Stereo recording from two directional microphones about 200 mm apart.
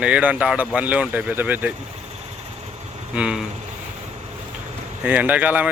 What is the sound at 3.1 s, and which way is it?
Speech, 5° right (ahead or behind).